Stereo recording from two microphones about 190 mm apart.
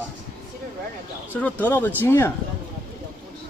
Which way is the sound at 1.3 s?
10° left (ahead or behind).